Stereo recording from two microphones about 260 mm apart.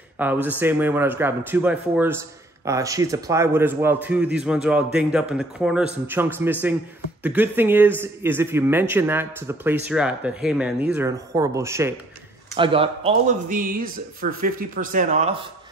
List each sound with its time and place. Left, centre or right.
0.2 s a man's voice: centre; by 15.3 s right